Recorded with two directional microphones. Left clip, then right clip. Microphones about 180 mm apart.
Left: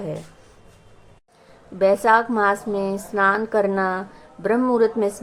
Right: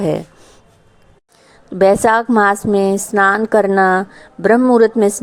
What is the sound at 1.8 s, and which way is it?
A woman's voice, 45° right (ahead or behind).